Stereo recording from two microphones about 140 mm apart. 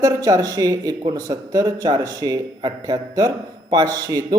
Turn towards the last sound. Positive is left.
turn(degrees=-25)  # may be behind; listen again after turning